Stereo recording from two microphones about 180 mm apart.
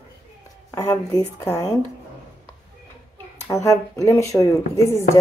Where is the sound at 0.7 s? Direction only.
20° left (ahead or behind).